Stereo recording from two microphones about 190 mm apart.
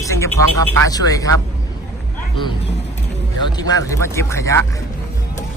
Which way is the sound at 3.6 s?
20° left (ahead or behind).